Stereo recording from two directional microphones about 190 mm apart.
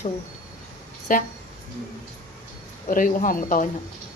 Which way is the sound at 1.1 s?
45° left (ahead or behind).